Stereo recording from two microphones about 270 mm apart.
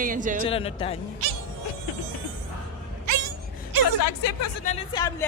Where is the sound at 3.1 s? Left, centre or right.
Right.